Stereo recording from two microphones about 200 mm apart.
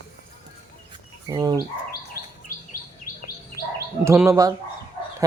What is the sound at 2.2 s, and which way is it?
Bird, 50° left (ahead or behind).